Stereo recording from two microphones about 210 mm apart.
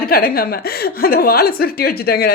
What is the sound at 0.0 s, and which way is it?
A woman's voice, 45° left (ahead or behind).